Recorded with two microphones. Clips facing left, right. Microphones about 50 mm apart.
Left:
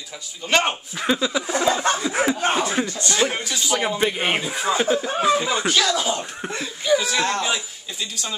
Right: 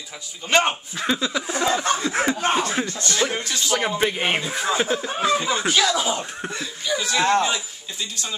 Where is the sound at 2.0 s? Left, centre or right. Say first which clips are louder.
Left 1 dB; centre.